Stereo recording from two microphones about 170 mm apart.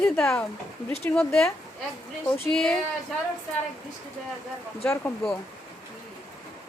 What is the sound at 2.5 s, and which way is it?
Speech, 5° left (ahead or behind).